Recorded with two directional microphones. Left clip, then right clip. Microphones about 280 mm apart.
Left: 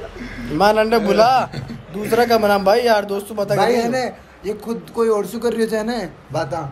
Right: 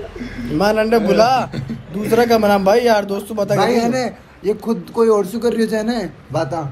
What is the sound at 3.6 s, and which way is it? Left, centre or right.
A man's voice, centre.